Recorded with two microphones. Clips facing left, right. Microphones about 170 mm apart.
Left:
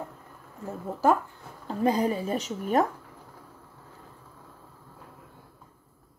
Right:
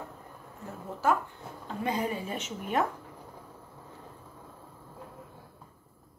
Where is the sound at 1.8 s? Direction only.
35° left (ahead or behind).